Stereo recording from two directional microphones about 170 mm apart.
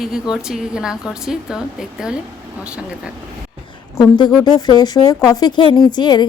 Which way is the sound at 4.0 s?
25° left (ahead or behind).